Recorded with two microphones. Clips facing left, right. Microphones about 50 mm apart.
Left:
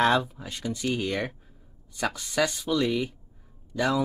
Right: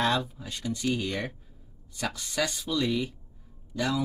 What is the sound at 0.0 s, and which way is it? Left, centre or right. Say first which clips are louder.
Speech: left 4 dB; centre.